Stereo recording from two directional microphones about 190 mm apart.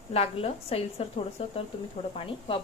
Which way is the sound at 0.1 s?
30° left (ahead or behind).